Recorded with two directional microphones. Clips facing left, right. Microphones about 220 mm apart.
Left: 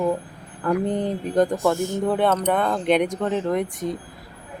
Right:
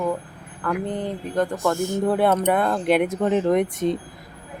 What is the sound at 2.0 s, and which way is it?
Speech, 5° right (ahead or behind).